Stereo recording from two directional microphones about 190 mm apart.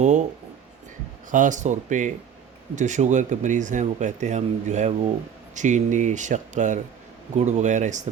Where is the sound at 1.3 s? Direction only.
40° right (ahead or behind).